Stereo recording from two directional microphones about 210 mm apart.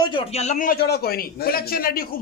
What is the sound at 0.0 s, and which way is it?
A man's voice, 25° left (ahead or behind).